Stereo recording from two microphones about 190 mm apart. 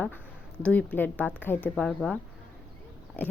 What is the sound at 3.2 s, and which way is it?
Pig, 10° left (ahead or behind).